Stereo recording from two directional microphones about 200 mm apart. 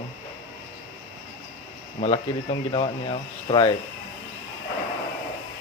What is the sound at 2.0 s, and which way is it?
Speech, 25° left (ahead or behind).